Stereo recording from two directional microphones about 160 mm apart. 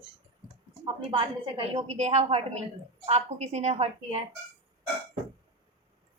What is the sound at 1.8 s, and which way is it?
A woman's voice, 45° right (ahead or behind).